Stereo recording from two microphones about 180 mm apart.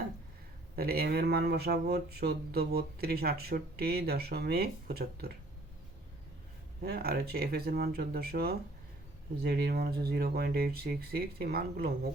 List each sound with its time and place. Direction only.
0.8 s speech: 60° right (ahead or behind)
6.8 s speech: 60° right (ahead or behind)